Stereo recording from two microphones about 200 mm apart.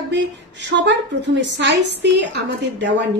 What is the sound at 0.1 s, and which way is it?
Speech, 60° right (ahead or behind).